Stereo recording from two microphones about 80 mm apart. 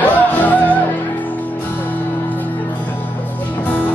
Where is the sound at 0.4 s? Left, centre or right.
Left.